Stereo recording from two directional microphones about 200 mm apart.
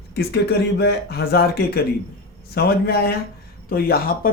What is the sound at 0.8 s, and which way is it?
Speech, 55° left (ahead or behind).